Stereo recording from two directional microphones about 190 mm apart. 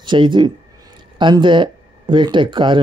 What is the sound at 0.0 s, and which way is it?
Speech, 25° right (ahead or behind).